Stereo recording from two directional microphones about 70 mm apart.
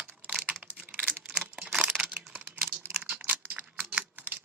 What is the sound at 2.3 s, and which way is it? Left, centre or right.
Computer keyboard, right.